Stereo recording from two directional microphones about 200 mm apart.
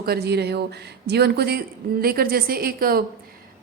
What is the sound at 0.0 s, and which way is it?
Speech, 50° right (ahead or behind).